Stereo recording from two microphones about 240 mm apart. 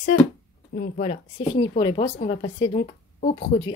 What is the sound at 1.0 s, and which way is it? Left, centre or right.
A woman's voice, left.